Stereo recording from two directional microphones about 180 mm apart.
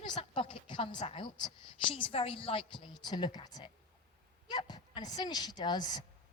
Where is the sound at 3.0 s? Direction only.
25° left (ahead or behind).